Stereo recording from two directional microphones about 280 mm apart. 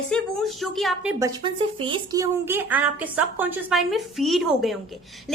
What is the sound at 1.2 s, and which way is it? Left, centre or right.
Speech, centre.